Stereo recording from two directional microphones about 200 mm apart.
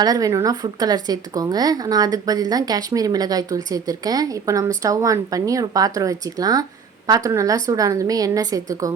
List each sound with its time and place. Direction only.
0.0 s a woman's voice: 20° right (ahead or behind)